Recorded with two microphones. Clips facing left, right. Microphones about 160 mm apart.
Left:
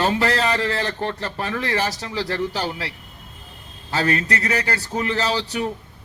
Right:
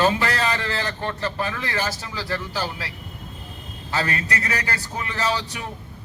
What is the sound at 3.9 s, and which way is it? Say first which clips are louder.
Speech: left 4 dB; 30° left (ahead or behind).